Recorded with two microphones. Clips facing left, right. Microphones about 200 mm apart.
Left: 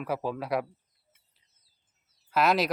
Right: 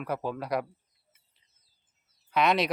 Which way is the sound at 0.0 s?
Centre (ahead or behind).